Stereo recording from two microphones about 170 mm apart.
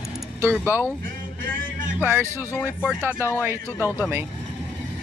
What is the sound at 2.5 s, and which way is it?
Speech, 10° left (ahead or behind).